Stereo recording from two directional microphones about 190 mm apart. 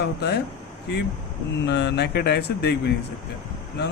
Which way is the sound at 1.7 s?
65° left (ahead or behind).